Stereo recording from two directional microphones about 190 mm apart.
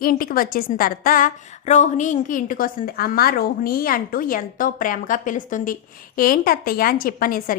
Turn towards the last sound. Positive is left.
turn(degrees=45)  # may be behind; listen again after turning